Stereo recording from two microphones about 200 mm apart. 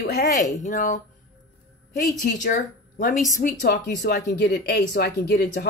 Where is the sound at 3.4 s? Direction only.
55° left (ahead or behind).